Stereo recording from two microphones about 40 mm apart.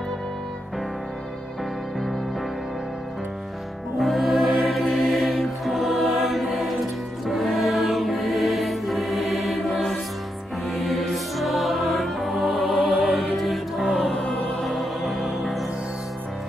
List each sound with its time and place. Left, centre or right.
4.0 s music: centre